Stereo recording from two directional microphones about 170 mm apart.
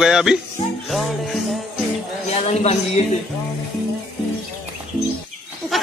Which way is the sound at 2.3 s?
40° left (ahead or behind).